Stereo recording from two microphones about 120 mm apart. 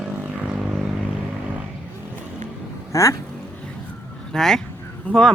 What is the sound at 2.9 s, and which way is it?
Speech, 25° left (ahead or behind).